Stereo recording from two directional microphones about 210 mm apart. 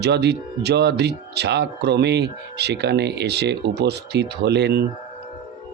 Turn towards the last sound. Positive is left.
turn(degrees=-50)  # may be behind; listen again after turning